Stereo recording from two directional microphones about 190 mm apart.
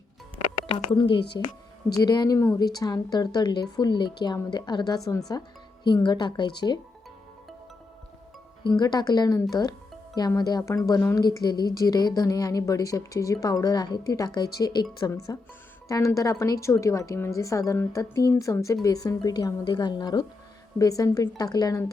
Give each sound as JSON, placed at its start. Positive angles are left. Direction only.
{"t": 0.9, "sound": "a woman's voice", "side_deg": 25}
{"t": 8.6, "sound": "a woman's voice", "side_deg": 20}